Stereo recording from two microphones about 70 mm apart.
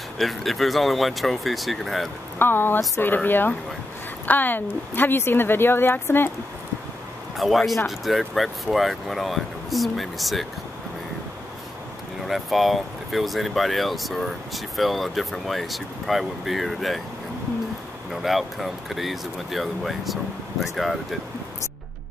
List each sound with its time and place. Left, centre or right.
0.2 s speech: centre
2.3 s a woman's voice: left
7.3 s speech: centre
12.3 s speech: centre
18.2 s speech: centre